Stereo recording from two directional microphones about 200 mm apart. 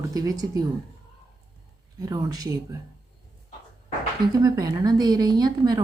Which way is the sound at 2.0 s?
20° right (ahead or behind).